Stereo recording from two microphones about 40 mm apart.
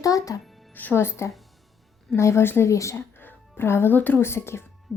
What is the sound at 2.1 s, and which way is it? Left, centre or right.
Speech, left.